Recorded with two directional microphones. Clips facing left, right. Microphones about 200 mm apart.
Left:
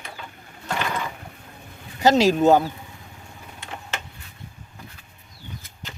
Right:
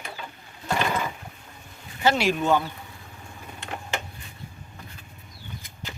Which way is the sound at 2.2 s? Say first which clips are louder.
Left 6 dB; 40° left (ahead or behind).